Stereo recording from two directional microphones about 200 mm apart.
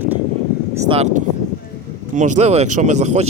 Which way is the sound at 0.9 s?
30° right (ahead or behind).